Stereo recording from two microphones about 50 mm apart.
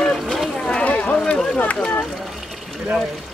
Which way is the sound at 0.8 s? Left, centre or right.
Left.